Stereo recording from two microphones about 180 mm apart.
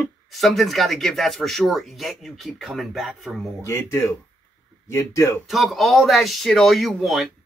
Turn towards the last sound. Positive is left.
turn(degrees=0)  # may be behind; listen again after turning